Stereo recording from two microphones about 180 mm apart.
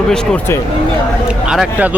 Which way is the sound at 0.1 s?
5° left (ahead or behind).